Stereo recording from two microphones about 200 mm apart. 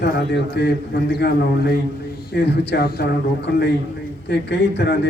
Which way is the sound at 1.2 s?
55° left (ahead or behind).